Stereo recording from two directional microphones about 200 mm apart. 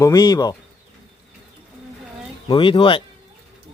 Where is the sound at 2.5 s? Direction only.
25° left (ahead or behind).